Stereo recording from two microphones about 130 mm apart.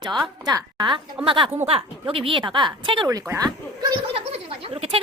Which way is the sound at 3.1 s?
25° right (ahead or behind).